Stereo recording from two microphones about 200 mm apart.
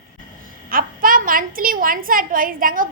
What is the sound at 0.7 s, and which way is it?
A woman's voice, 45° right (ahead or behind).